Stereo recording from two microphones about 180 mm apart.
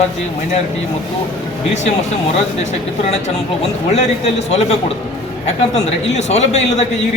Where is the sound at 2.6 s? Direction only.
40° left (ahead or behind).